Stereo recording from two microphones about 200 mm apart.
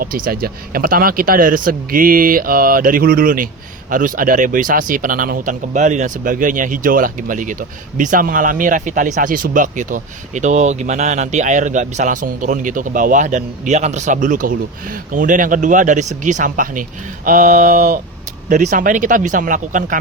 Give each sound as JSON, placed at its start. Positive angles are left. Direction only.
{"t": 0.0, "sound": "speech", "side_deg": -45}